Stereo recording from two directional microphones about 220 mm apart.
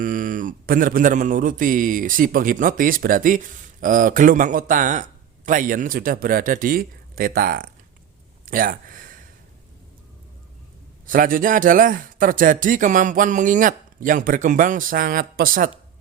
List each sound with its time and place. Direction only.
0.0 s mantra: 35° right (ahead or behind)
8.4 s speech: 40° right (ahead or behind)
11.0 s mantra: 40° right (ahead or behind)